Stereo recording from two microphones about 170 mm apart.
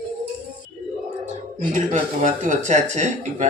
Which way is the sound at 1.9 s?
50° right (ahead or behind).